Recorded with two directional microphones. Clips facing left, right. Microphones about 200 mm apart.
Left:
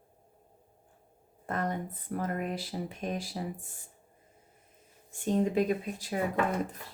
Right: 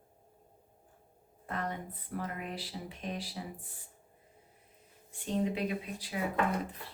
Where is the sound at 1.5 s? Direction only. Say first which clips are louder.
Left 5 dB; 45° left (ahead or behind).